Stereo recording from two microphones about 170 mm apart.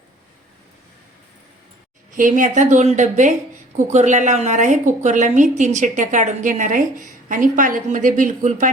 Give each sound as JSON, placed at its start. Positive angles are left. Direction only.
{"t": 2.1, "sound": "speech", "side_deg": -50}